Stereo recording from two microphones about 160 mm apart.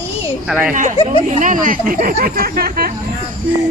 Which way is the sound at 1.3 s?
55° right (ahead or behind).